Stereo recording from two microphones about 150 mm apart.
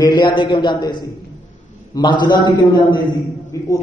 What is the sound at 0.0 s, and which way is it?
A man's voice, 30° left (ahead or behind).